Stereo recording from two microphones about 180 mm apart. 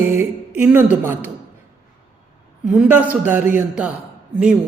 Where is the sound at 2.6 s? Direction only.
10° right (ahead or behind).